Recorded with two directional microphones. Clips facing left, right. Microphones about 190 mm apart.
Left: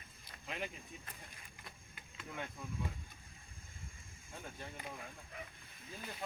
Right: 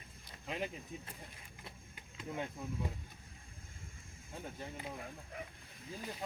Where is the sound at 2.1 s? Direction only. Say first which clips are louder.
Right 5 dB; 20° right (ahead or behind).